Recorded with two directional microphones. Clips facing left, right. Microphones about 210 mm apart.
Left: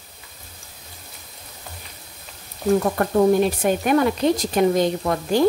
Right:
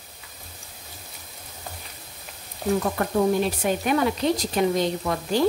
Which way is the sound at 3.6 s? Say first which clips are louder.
Left 4 dB; 50° left (ahead or behind).